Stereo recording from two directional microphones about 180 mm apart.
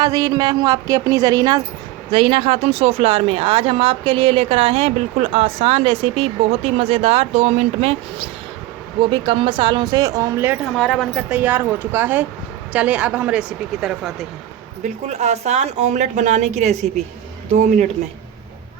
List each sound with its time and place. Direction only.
0.0 s a woman's voice: 20° right (ahead or behind)
10.6 s speech: 5° left (ahead or behind)
11.2 s speech: 10° right (ahead or behind)
15.2 s a woman's voice: 40° right (ahead or behind)